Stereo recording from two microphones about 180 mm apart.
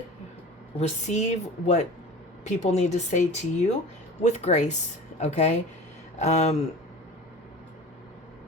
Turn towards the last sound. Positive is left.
turn(degrees=40)  # may be behind; listen again after turning